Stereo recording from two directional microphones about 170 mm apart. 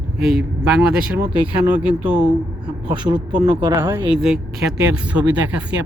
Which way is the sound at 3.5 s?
25° right (ahead or behind).